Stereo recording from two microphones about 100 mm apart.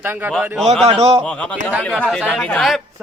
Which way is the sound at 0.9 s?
75° right (ahead or behind).